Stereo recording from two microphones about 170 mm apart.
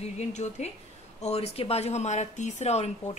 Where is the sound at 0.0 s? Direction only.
40° left (ahead or behind).